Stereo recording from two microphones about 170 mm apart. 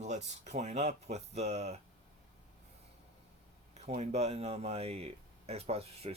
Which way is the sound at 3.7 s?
40° right (ahead or behind).